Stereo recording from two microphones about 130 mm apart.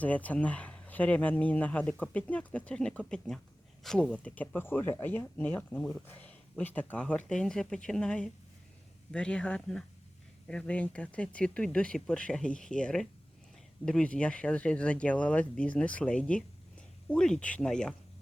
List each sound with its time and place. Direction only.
0.0 s speech: 10° left (ahead or behind)